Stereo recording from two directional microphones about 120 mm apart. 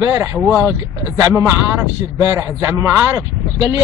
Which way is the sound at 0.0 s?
20° right (ahead or behind).